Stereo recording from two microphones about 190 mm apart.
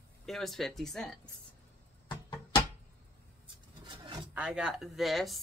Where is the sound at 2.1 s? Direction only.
25° left (ahead or behind).